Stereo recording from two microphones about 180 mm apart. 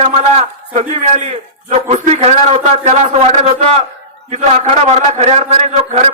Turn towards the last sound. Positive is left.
turn(degrees=-40)  # may be behind; listen again after turning